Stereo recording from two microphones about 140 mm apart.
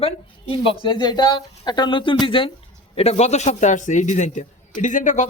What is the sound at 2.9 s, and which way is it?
A man's voice, 50° left (ahead or behind).